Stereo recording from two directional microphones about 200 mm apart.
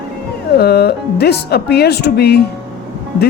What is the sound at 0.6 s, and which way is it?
Speech, 55° left (ahead or behind).